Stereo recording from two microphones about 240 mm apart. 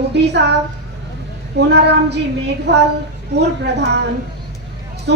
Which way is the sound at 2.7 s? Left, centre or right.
Right.